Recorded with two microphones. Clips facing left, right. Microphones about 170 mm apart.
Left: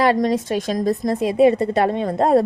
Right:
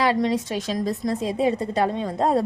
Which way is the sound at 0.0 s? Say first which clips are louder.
Left 4 dB; 50° left (ahead or behind).